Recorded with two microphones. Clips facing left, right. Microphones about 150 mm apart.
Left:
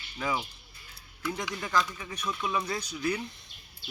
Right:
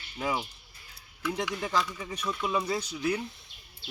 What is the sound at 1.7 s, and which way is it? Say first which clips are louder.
Speech: left 1 dB; 25° right (ahead or behind).